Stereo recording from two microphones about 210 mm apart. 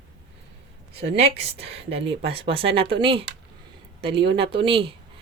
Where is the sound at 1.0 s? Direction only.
30° right (ahead or behind).